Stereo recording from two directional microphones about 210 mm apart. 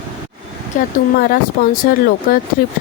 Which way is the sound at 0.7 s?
40° left (ahead or behind).